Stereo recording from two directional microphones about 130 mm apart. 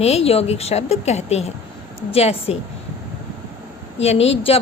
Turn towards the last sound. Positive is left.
turn(degrees=50)  # may be behind; listen again after turning